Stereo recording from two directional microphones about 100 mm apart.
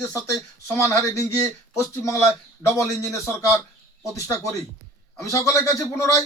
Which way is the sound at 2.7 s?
30° left (ahead or behind).